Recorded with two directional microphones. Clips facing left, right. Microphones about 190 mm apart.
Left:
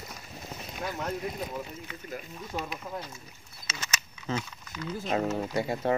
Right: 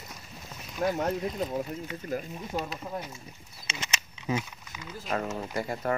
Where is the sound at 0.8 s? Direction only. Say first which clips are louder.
Right 8 dB; 45° right (ahead or behind).